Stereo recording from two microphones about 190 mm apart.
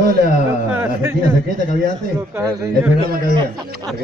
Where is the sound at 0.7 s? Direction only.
15° right (ahead or behind).